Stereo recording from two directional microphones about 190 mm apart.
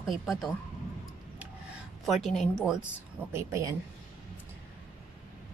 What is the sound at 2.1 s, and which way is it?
Speech, centre (ahead or behind).